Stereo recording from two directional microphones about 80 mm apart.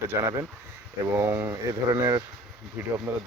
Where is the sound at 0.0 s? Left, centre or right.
Right.